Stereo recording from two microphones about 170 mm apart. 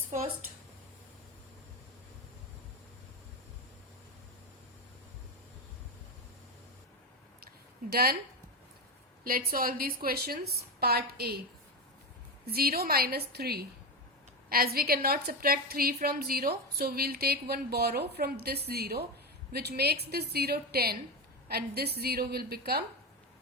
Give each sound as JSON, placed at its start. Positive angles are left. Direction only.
{"t": 7.4, "sound": "a sound", "side_deg": -65}
{"t": 9.2, "sound": "a woman's voice", "side_deg": -60}
{"t": 12.5, "sound": "a woman's voice", "side_deg": -65}